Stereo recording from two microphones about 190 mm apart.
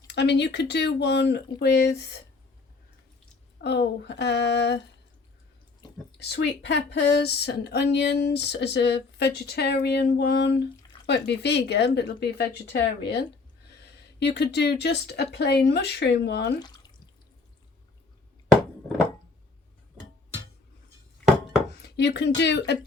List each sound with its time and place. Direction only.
0.1 s speech: 65° left (ahead or behind)
3.6 s speech: 65° left (ahead or behind)
6.1 s speech: 60° left (ahead or behind)
16.6 s drip: 20° left (ahead or behind)
21.8 s a sound: 60° left (ahead or behind)
22.4 s speech: 65° left (ahead or behind)